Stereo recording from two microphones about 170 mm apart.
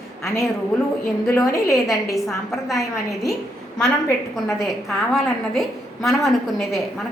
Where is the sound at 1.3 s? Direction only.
15° left (ahead or behind).